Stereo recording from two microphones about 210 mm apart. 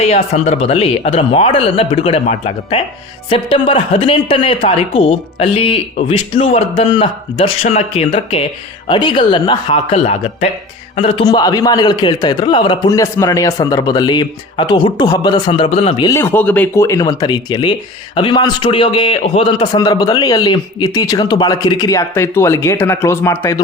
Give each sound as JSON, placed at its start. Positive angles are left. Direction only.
{"t": 0.0, "sound": "speech", "side_deg": 30}
{"t": 16.1, "sound": "speech", "side_deg": 10}